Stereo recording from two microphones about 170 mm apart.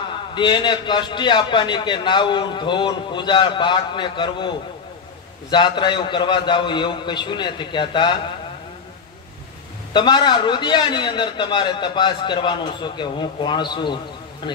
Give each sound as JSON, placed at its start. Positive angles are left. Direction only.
{"t": 0.3, "sound": "a man's voice", "side_deg": 25}
{"t": 9.9, "sound": "a man's voice", "side_deg": 25}